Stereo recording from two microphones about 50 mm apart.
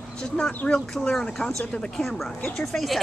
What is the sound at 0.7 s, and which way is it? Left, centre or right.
Speech, centre.